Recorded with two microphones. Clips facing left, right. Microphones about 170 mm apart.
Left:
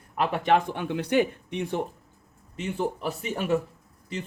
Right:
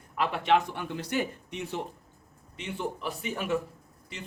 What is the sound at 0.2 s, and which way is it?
Speech, 45° left (ahead or behind).